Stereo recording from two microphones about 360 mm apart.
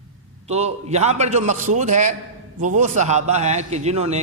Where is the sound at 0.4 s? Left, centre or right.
Centre.